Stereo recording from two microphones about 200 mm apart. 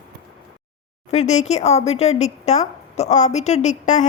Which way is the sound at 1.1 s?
35° left (ahead or behind).